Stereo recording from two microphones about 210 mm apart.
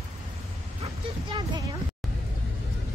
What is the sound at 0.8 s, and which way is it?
Music, 20° right (ahead or behind).